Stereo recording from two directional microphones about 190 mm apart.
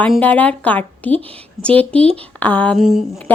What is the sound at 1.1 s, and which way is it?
Speech, 30° right (ahead or behind).